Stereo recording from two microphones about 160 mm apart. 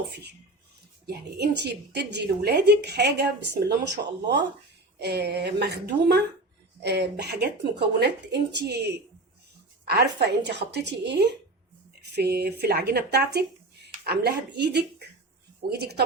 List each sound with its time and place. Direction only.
0.1 s a woman's voice: 90° right